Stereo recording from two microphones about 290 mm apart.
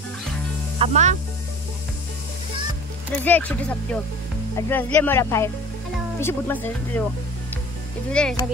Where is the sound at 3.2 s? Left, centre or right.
Centre.